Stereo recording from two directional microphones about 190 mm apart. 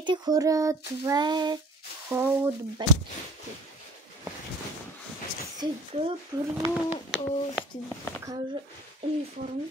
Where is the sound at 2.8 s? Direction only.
25° right (ahead or behind).